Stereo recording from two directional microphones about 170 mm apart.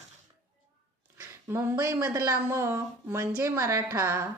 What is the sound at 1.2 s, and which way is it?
Speech, 15° right (ahead or behind).